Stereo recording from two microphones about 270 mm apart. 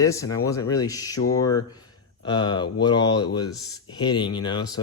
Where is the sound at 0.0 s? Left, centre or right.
Centre.